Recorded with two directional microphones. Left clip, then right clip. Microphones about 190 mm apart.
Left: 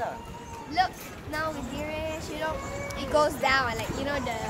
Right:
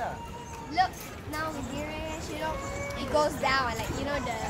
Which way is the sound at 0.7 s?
40° left (ahead or behind).